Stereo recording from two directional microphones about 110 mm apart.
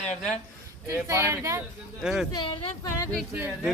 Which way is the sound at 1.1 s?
25° right (ahead or behind).